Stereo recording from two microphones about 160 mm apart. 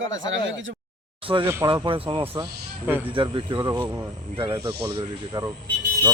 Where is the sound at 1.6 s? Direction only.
30° right (ahead or behind).